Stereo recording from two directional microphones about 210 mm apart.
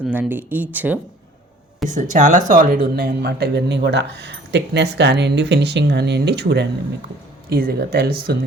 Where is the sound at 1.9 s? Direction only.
35° right (ahead or behind).